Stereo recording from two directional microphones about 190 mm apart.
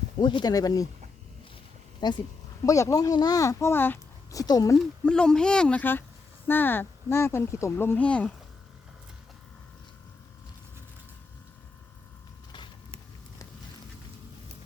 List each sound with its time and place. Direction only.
0.2 s speech: 25° left (ahead or behind)
2.0 s speech: 20° left (ahead or behind)
5.0 s speech: 5° left (ahead or behind)
12.5 s a sound: 25° left (ahead or behind)